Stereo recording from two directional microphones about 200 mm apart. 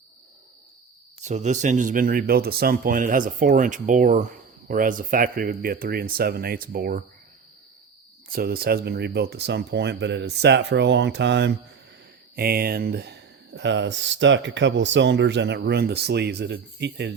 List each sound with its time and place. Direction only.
1.2 s speech: 35° right (ahead or behind)
8.3 s speech: 50° right (ahead or behind)
12.4 s speech: 50° right (ahead or behind)